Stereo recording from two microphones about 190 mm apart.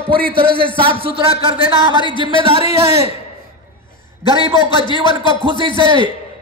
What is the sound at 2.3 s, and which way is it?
Speech, 30° right (ahead or behind).